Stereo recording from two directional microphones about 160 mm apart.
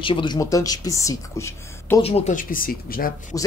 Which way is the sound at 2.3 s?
60° left (ahead or behind).